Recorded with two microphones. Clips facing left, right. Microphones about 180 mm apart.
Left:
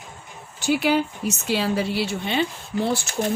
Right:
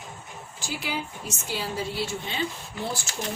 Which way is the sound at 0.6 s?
70° left (ahead or behind).